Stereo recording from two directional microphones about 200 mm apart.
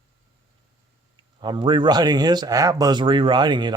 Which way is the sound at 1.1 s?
25° right (ahead or behind).